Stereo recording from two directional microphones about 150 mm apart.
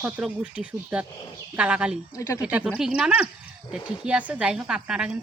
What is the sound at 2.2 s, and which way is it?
Speech, 20° left (ahead or behind).